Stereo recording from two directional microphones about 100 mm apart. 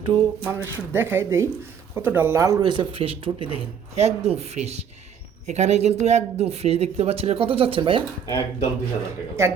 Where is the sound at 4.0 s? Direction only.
90° right.